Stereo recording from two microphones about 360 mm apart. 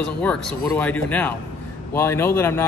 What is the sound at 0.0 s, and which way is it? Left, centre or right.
Speech, centre.